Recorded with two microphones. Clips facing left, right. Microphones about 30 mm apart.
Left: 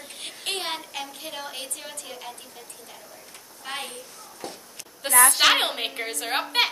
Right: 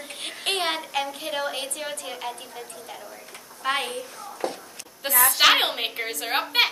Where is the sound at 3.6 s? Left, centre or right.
Right.